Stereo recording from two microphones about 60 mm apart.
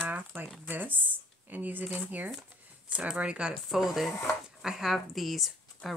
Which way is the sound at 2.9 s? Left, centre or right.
Centre.